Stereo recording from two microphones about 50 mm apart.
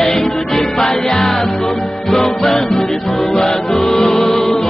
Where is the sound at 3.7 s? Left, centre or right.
Centre.